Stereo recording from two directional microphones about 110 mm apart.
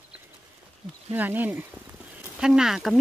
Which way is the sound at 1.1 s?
15° right (ahead or behind).